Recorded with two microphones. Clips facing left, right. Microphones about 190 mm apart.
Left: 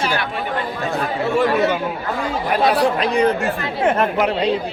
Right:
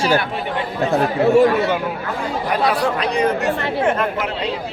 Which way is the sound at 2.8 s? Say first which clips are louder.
Left 2 dB; 30° left (ahead or behind).